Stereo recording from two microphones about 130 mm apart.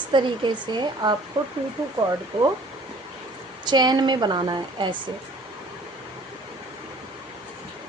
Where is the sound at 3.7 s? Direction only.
35° right (ahead or behind).